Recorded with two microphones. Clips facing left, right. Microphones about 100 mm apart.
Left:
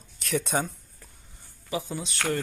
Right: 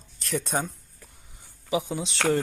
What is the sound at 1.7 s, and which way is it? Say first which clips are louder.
Speech: right 4 dB; 15° right (ahead or behind).